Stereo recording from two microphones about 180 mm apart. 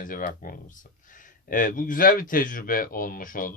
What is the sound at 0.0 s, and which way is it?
Speech, 50° left (ahead or behind).